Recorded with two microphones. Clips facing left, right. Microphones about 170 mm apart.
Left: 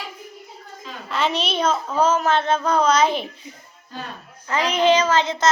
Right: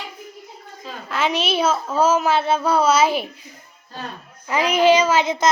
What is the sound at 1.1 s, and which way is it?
A child's voice, centre (ahead or behind).